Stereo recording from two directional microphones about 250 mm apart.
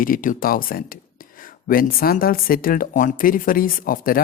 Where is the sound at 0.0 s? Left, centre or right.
Left.